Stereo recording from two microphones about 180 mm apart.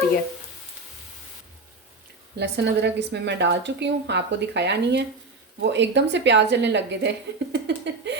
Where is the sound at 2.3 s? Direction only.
70° right (ahead or behind).